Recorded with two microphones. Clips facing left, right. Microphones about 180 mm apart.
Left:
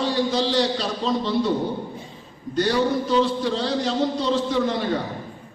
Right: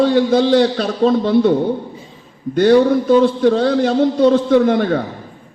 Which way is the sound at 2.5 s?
55° right (ahead or behind).